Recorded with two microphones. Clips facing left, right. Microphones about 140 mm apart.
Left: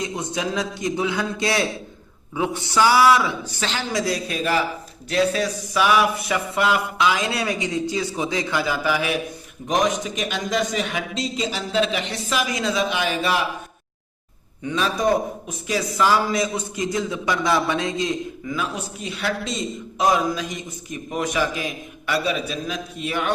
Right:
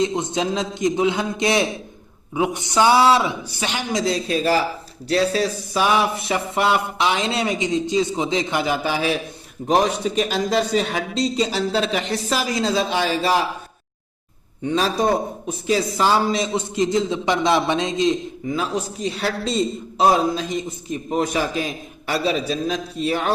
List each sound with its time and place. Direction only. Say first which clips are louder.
0.0 s a man's voice: right 5 dB; 25° right (ahead or behind)
3.6 s a man's voice: right 2 dB; 15° right (ahead or behind); by 13.4 s 35° right (ahead or behind)
14.6 s a man's voice: right 2 dB; 35° right (ahead or behind)